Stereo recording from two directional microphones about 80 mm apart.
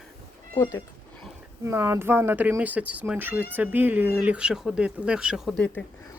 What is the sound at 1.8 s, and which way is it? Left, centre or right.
Speech, right.